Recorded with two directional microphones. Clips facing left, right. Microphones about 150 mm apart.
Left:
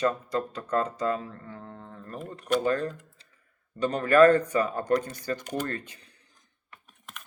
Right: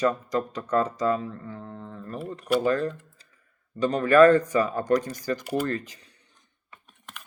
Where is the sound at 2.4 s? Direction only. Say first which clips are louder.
Right 2 dB; 5° right (ahead or behind).